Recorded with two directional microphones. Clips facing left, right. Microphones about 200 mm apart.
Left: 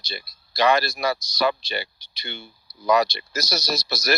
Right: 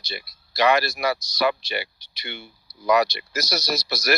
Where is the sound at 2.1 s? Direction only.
30° left (ahead or behind).